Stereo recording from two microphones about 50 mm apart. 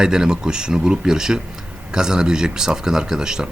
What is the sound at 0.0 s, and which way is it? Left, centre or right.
Speech, centre.